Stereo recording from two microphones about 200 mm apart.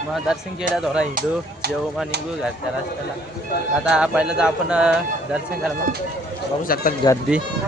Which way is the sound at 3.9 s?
5° right (ahead or behind).